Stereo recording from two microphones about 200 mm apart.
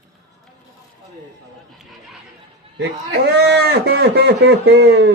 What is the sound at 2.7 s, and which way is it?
A man's voice, 55° right (ahead or behind).